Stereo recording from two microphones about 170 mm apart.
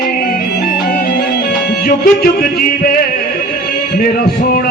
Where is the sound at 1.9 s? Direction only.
60° left (ahead or behind).